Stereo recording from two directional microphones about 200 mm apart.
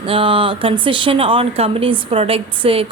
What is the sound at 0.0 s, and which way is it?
Speech, 25° right (ahead or behind).